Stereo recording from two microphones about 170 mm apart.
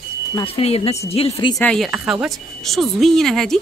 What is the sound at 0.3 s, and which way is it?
Speech, 30° left (ahead or behind).